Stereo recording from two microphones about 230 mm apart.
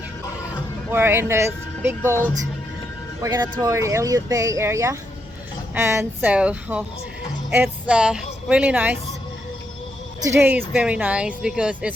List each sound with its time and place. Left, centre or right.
0.9 s speech: centre
3.2 s a woman's voice: centre
10.2 s speech: centre